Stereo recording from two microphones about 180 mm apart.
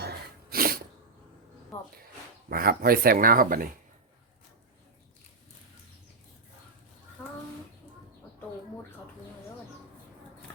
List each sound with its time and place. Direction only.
0.0 s sneeze: 60° right (ahead or behind)
2.5 s speech: 55° right (ahead or behind)